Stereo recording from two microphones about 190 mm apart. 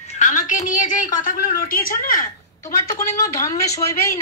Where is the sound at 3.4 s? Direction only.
15° left (ahead or behind).